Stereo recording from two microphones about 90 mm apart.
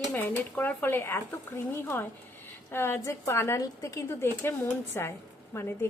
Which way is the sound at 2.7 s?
25° left (ahead or behind).